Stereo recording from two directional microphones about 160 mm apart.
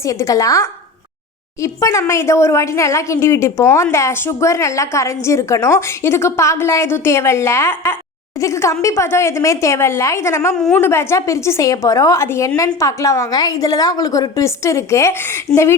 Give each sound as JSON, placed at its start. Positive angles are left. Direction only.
{"t": 0.0, "sound": "a woman's voice", "side_deg": 20}
{"t": 10.5, "sound": "a woman's voice", "side_deg": 5}
{"t": 10.8, "sound": "a woman's voice", "side_deg": 15}